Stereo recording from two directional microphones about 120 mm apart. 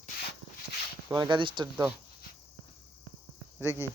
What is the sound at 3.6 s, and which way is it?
Speech, 20° right (ahead or behind).